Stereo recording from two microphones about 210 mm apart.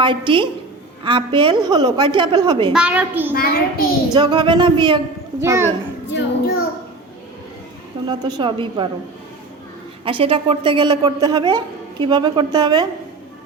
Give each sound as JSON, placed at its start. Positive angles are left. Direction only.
{"t": 0.0, "sound": "a woman's voice", "side_deg": -25}
{"t": 2.7, "sound": "a woman's voice", "side_deg": -5}
{"t": 3.3, "sound": "a child's voice", "side_deg": 45}
{"t": 4.1, "sound": "a woman's voice", "side_deg": -20}
{"t": 6.1, "sound": "a child's voice", "side_deg": 60}
{"t": 8.0, "sound": "a woman's voice", "side_deg": -20}
{"t": 10.0, "sound": "a woman's voice", "side_deg": -25}